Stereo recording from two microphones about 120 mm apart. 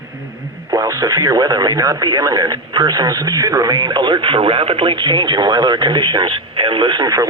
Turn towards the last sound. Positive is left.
turn(degrees=-30)  # may be behind; listen again after turning